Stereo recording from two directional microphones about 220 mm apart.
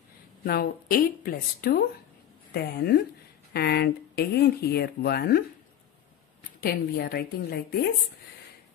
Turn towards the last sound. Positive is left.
turn(degrees=45)  # may be behind; listen again after turning